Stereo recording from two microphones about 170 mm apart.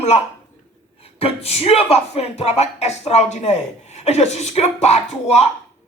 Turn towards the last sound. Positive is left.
turn(degrees=40)  # may be behind; listen again after turning